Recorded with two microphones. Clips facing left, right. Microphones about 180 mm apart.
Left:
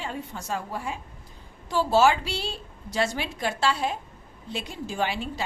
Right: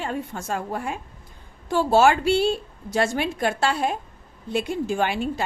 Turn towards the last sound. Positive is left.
turn(degrees=-50)  # may be behind; listen again after turning